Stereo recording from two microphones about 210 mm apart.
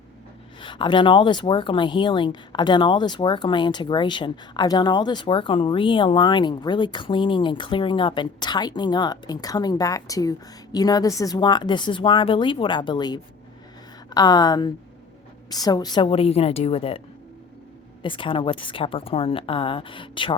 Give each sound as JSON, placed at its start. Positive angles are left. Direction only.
{"t": 0.6, "sound": "speech", "side_deg": 25}
{"t": 18.0, "sound": "speech", "side_deg": 25}